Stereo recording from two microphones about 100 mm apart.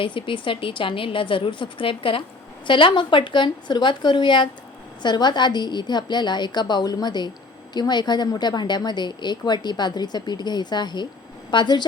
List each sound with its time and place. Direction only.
0.0 s a woman's voice: 60° left (ahead or behind)